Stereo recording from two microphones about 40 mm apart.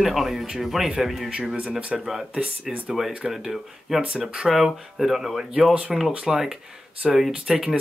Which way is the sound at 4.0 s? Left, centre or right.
Right.